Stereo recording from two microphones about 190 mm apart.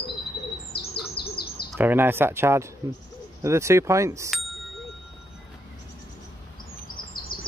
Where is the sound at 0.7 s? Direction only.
55° left (ahead or behind).